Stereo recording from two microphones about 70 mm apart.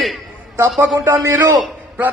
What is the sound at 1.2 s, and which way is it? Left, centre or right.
Speech, right.